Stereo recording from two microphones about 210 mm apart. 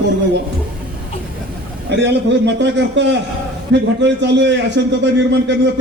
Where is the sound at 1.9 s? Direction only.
55° right (ahead or behind).